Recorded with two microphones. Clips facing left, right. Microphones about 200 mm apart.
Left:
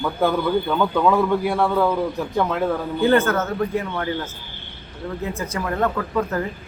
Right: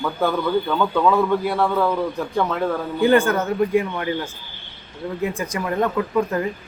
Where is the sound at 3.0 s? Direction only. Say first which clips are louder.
Right 1 dB; 15° right (ahead or behind).